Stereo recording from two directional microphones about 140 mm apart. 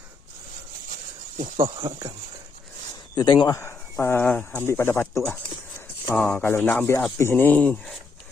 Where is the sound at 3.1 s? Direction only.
30° left (ahead or behind); by 7.9 s 10° left (ahead or behind).